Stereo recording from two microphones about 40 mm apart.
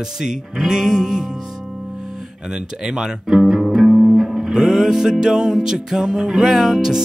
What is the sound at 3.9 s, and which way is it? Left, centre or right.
Music, centre.